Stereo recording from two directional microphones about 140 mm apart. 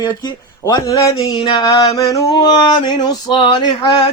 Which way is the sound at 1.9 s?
25° left (ahead or behind).